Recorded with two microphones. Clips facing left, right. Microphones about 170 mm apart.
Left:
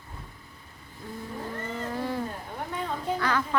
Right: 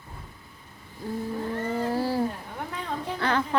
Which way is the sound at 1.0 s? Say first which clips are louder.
Right 8 dB; 30° right (ahead or behind).